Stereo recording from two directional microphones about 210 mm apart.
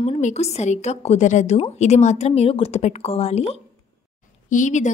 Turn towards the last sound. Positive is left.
turn(degrees=35)  # may be behind; listen again after turning